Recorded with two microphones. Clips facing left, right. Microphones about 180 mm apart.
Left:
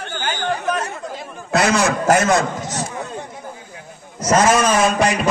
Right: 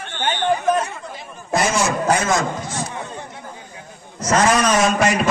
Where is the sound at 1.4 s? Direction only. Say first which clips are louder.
Left 3 dB; 70° left (ahead or behind).